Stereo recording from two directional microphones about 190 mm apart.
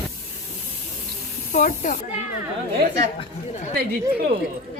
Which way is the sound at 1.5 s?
45° left (ahead or behind).